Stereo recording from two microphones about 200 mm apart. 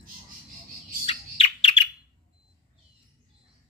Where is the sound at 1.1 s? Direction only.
30° left (ahead or behind).